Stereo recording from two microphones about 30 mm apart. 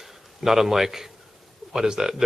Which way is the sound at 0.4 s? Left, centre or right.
Centre.